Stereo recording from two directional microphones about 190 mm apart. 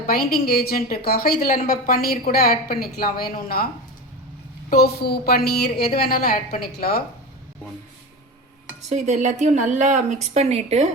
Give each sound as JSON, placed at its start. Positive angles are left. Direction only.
{"t": 0.1, "sound": "a woman's voice", "side_deg": 50}
{"t": 4.7, "sound": "a woman's voice", "side_deg": 55}
{"t": 8.9, "sound": "a woman's voice", "side_deg": -35}